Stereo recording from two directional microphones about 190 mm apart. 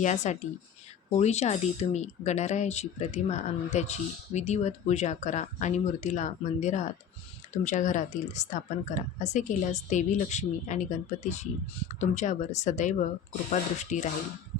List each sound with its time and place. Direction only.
0.0 s speech: 40° left (ahead or behind)